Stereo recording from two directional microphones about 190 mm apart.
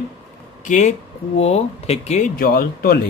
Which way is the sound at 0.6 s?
40° left (ahead or behind).